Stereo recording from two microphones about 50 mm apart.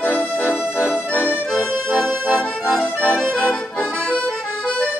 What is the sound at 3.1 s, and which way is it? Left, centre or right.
Accordion, centre.